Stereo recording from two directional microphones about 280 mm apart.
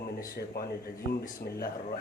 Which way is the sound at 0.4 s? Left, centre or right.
Left.